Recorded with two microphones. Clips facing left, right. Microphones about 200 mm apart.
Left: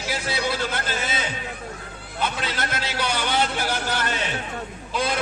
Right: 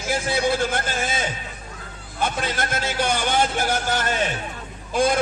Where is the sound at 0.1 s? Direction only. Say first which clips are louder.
Right 5 dB; 50° right (ahead or behind).